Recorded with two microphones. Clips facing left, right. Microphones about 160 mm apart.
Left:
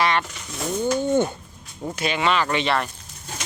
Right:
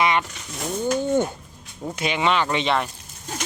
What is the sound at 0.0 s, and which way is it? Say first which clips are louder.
Vehicle: right 1 dB; 15° right (ahead or behind).